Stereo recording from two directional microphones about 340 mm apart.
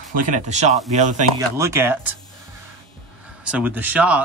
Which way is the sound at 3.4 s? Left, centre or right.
Centre.